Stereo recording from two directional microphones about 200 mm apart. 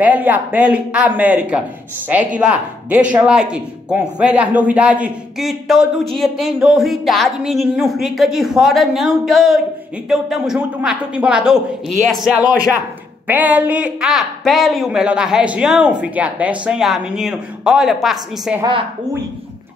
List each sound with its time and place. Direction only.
0.0 s speech: 10° right (ahead or behind)
18.6 s a woman's voice: 25° right (ahead or behind)